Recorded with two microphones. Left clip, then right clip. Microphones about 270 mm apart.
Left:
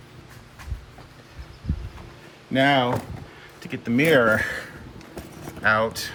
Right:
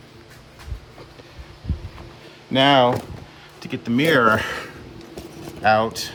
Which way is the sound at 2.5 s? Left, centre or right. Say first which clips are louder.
Right 4 dB; centre.